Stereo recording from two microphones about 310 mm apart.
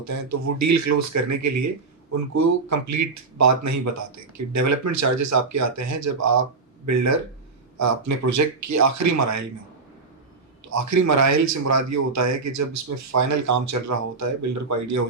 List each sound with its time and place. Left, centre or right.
0.0 s speech: right
10.7 s speech: right